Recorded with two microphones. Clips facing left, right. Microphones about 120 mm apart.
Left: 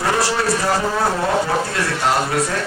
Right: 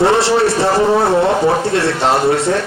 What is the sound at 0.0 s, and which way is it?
Speech, 25° right (ahead or behind).